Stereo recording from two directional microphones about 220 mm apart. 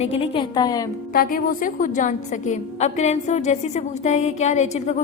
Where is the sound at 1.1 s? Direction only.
40° left (ahead or behind).